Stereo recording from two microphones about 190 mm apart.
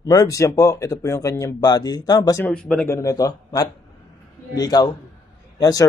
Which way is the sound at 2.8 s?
15° left (ahead or behind).